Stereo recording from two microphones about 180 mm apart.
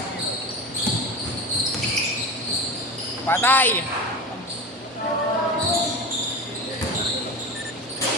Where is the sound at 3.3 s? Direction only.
10° left (ahead or behind).